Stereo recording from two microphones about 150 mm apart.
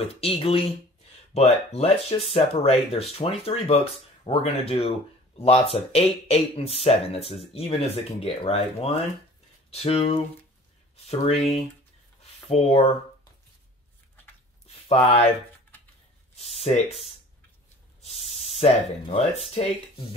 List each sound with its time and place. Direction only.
0.0 s speech: 40° left (ahead or behind)
16.3 s a sound: 45° left (ahead or behind)
18.0 s spray: 45° left (ahead or behind)
18.6 s speech: 40° left (ahead or behind)